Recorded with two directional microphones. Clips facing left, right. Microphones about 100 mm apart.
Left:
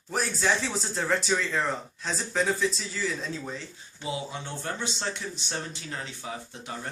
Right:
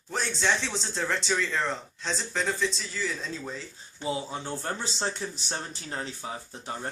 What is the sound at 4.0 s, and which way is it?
Speech, 35° right (ahead or behind).